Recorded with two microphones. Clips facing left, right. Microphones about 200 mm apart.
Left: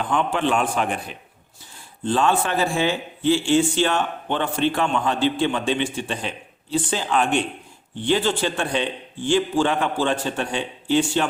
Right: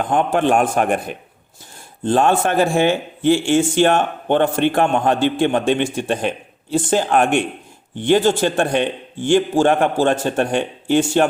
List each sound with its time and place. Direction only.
0.0 s speech: 50° right (ahead or behind)